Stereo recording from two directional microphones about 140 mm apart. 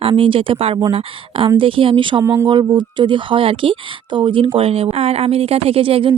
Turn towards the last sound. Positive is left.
turn(degrees=-40)  # may be behind; listen again after turning